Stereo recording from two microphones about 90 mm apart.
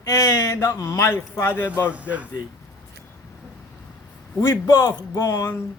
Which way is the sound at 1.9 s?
15° right (ahead or behind).